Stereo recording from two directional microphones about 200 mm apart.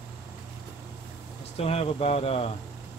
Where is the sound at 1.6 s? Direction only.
30° left (ahead or behind).